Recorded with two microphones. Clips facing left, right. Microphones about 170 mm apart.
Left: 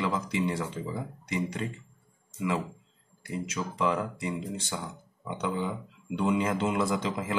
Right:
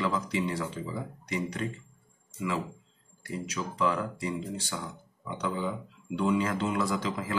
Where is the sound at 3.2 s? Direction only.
25° left (ahead or behind).